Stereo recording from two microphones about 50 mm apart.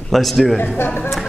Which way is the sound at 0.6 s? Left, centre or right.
Left.